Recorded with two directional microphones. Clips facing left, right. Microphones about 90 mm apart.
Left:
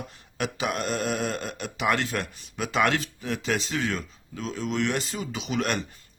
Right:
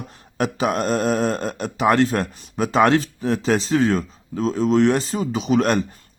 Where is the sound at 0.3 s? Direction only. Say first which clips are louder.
Right 7 dB; 40° right (ahead or behind).